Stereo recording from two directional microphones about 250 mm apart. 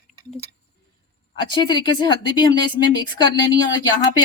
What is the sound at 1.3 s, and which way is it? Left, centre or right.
A woman's voice, centre.